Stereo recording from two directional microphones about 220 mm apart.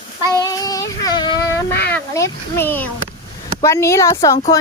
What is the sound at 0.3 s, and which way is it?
Child singing, 15° left (ahead or behind).